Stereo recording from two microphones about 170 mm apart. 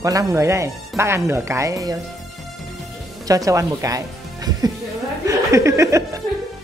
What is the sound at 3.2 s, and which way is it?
Speech, 20° right (ahead or behind).